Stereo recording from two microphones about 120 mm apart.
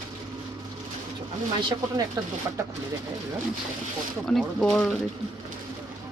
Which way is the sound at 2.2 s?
30° right (ahead or behind).